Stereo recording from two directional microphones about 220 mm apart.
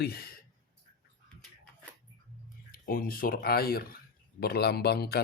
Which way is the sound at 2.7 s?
40° left (ahead or behind).